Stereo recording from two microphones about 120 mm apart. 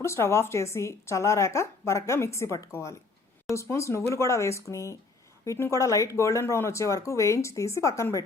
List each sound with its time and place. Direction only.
0.0 s a woman's voice: 20° left (ahead or behind)